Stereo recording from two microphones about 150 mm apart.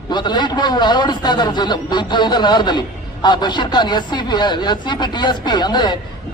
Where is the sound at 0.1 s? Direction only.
30° left (ahead or behind).